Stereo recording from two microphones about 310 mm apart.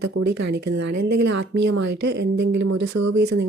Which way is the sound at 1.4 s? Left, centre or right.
Right.